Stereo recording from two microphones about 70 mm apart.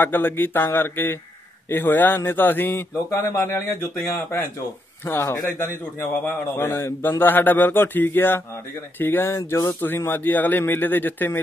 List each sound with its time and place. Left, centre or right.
0.0 s a man's voice: left